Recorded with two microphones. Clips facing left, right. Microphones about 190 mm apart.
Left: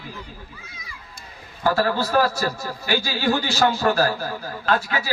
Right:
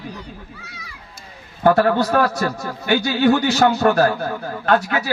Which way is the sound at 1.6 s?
60° right (ahead or behind).